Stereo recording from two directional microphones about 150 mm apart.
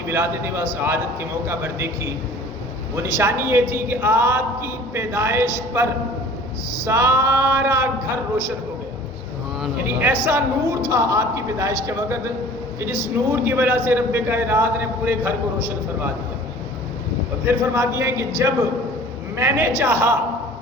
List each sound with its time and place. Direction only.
0.1 s a man's voice: 15° right (ahead or behind)
2.9 s a man's voice: 15° right (ahead or behind)
10.2 s a woman's voice: 15° right (ahead or behind)
17.4 s a woman's voice: 15° right (ahead or behind)